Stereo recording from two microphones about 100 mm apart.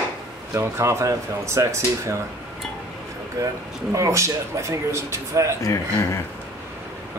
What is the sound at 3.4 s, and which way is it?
Speech, 30° right (ahead or behind).